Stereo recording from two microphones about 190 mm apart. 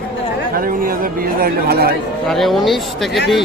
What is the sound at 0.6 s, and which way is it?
Speech, 50° right (ahead or behind).